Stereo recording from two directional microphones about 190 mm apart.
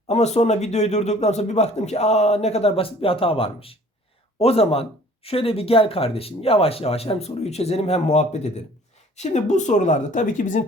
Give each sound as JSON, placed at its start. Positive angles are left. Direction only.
{"t": 0.1, "sound": "speech", "side_deg": 35}